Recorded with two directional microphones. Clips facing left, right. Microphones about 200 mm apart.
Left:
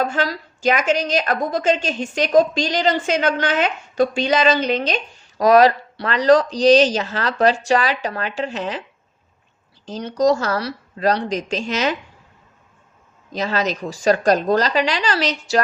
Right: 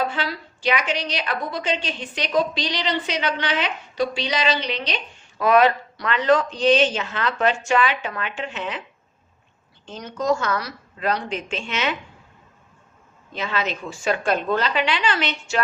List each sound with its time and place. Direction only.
0.0 s a woman's voice: 45° left (ahead or behind)
9.8 s a woman's voice: 35° left (ahead or behind)
13.3 s a woman's voice: 40° left (ahead or behind)